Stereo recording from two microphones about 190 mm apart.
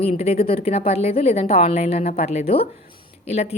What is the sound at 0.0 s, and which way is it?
A woman's voice, 30° left (ahead or behind).